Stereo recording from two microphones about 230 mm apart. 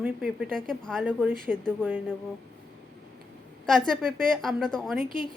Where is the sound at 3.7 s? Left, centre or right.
Centre.